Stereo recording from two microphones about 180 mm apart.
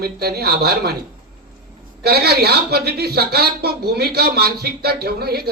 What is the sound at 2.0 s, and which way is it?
Speech, 60° right (ahead or behind).